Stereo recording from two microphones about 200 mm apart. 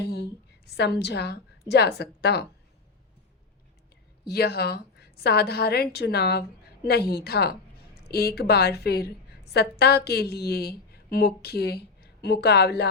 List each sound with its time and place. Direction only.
0.0 s a sound: 55° left (ahead or behind)
0.7 s a woman's voice: 55° left (ahead or behind)
4.3 s a woman's voice: 50° left (ahead or behind)